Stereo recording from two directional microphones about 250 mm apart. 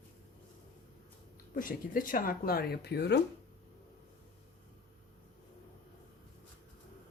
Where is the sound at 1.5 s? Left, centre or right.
Left.